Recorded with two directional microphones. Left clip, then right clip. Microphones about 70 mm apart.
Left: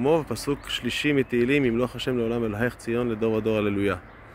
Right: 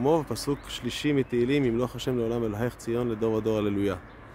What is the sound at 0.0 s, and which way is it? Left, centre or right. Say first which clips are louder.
Speech: left 2 dB; right.